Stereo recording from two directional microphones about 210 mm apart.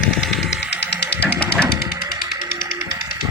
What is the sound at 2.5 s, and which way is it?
Music, 45° left (ahead or behind).